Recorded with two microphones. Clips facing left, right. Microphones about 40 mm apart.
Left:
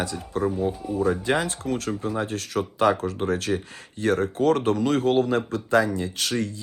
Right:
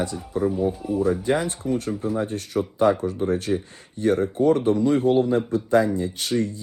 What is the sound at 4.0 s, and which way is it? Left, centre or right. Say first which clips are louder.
A man's voice: right 2 dB; left.